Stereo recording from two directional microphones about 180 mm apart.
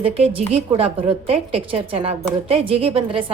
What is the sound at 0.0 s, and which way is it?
A woman's voice, 30° right (ahead or behind).